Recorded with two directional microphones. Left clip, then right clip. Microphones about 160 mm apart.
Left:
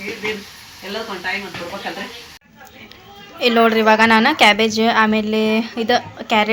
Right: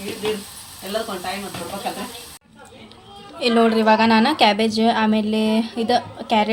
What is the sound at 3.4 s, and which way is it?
A woman's voice, centre (ahead or behind).